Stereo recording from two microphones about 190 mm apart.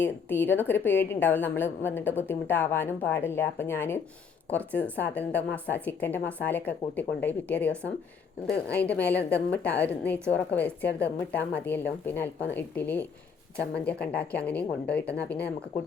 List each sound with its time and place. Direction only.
0.0 s a woman's voice: 10° left (ahead or behind)